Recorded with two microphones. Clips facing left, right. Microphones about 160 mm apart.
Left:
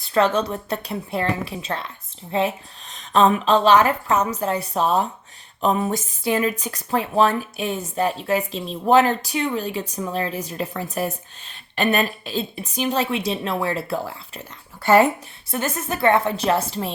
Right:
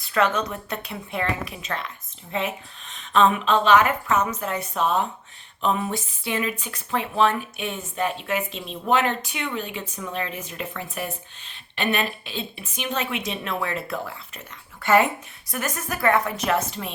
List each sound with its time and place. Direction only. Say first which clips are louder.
0.0 s a woman's voice: left 3 dB; 30° left (ahead or behind)